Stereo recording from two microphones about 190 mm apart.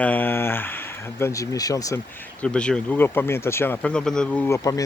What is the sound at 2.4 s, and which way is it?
Speech, 5° left (ahead or behind).